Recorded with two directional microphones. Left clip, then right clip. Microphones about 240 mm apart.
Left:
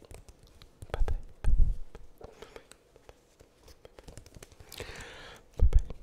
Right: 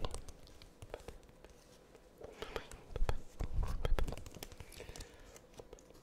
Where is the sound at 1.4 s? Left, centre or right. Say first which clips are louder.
Left 15 dB; left.